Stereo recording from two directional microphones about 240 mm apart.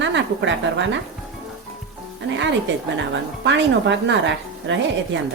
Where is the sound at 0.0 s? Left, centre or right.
Right.